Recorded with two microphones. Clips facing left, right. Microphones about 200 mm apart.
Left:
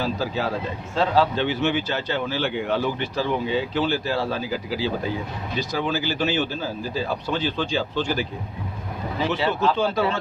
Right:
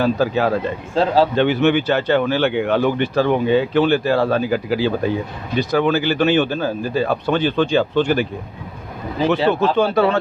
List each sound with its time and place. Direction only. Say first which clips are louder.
0.0 s speech: right 8 dB; 60° right (ahead or behind)
0.9 s speech: right 4 dB; 35° right (ahead or behind)
1.4 s speech: right 7 dB; 60° right (ahead or behind)
9.3 s speech: right 6 dB; 55° right (ahead or behind)